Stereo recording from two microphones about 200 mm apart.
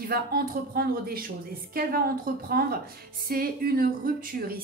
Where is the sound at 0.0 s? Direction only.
50° right (ahead or behind).